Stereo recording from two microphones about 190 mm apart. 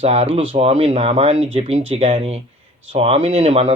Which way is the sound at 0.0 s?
30° right (ahead or behind).